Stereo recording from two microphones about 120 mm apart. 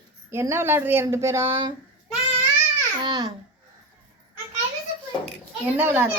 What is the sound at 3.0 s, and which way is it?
Speech, 35° right (ahead or behind).